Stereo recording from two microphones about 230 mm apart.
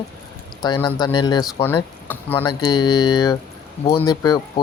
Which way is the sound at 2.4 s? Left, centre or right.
Centre.